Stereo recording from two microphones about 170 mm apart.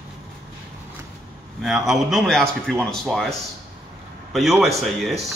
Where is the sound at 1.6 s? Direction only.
Centre (ahead or behind).